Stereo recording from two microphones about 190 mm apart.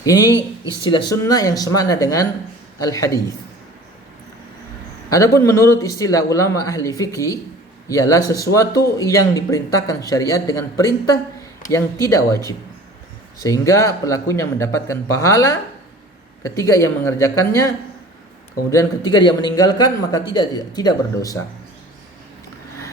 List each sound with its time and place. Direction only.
0.0 s a man's voice: 20° left (ahead or behind)
5.0 s a man's voice: 15° left (ahead or behind)
13.4 s a man's voice: 15° left (ahead or behind)
18.7 s speech: 20° left (ahead or behind)